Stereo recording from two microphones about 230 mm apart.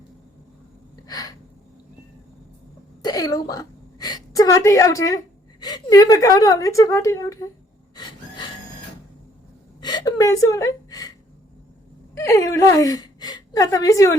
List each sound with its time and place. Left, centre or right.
1.0 s gasp: centre
3.0 s a woman's voice: centre
7.9 s a sound: centre
9.8 s whimper: centre
12.1 s a woman's voice: centre